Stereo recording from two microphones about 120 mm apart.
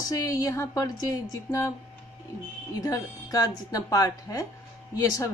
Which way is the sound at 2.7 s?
30° left (ahead or behind).